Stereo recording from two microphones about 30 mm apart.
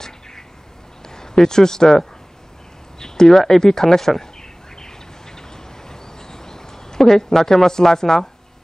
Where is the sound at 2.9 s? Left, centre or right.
Left.